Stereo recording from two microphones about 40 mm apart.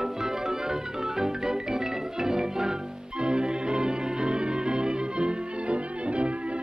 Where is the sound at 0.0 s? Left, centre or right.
Centre.